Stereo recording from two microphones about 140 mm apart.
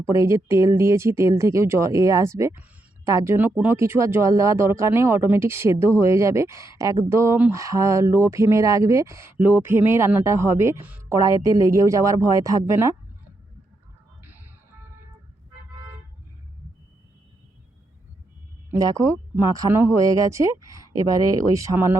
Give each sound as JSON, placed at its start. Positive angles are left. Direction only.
{"t": 0.2, "sound": "speech", "side_deg": -20}
{"t": 11.2, "sound": "speech", "side_deg": -25}
{"t": 14.3, "sound": "music", "side_deg": -15}
{"t": 18.7, "sound": "speech", "side_deg": -20}